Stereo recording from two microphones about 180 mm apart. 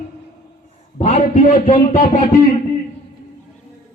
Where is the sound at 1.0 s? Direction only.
40° left (ahead or behind).